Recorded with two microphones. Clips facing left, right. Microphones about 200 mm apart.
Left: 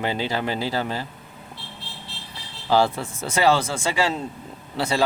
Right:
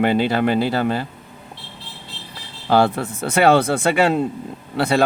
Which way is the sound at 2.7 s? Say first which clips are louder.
Right 3 dB; 60° right (ahead or behind).